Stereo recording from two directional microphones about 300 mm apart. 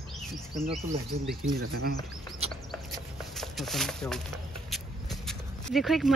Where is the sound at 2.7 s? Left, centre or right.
Centre.